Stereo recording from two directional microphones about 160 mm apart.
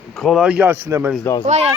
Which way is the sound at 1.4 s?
45° right (ahead or behind).